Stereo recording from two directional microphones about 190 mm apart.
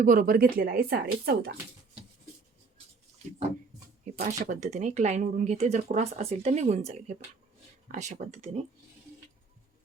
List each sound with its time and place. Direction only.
0.0 s speech: 45° right (ahead or behind)
4.0 s speech: 40° right (ahead or behind)